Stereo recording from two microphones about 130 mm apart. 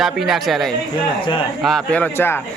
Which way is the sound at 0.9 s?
40° left (ahead or behind).